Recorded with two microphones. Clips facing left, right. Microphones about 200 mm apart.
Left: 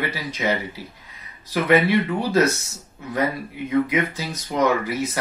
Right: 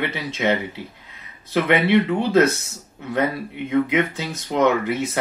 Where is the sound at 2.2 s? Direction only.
25° right (ahead or behind).